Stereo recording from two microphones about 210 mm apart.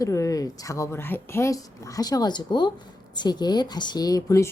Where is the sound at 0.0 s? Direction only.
15° left (ahead or behind).